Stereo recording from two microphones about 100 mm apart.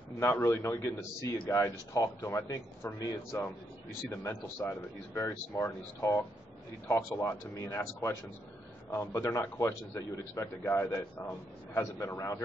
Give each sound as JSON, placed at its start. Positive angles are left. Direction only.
{"t": 0.2, "sound": "a man's voice", "side_deg": 25}